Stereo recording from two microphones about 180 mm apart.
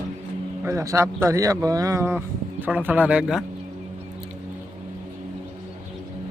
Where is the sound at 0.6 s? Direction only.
15° right (ahead or behind).